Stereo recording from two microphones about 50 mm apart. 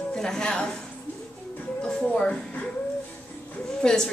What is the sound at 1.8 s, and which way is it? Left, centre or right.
Music, centre.